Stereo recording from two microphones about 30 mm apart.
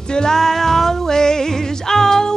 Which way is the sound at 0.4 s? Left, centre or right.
Centre.